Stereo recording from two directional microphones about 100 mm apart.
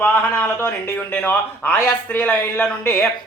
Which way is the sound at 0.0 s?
15° left (ahead or behind).